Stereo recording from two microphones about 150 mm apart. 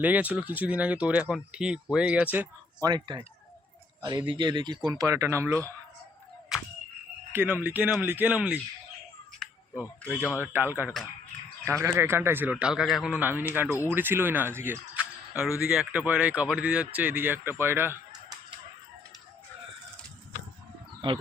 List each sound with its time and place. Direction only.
0.0 s speech: 10° right (ahead or behind)
2.8 s speech: 25° right (ahead or behind)
4.3 s speech: 30° right (ahead or behind)
6.5 s a sound: 5° right (ahead or behind)
7.3 s speech: 15° right (ahead or behind)
9.4 s a sound: 5° left (ahead or behind)
9.7 s speech: 20° left (ahead or behind)
10.4 s speech: 15° right (ahead or behind)
21.0 s speech: 30° right (ahead or behind)